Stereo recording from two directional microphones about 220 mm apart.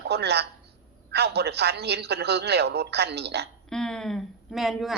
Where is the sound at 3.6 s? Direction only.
Centre (ahead or behind).